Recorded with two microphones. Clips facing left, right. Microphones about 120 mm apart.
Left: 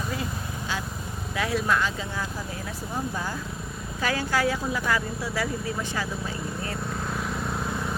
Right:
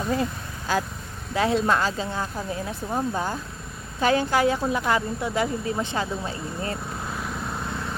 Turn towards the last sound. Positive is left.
turn(degrees=5)  # may be behind; listen again after turning